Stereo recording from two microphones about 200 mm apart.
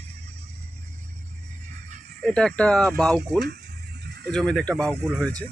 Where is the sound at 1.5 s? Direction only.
35° right (ahead or behind).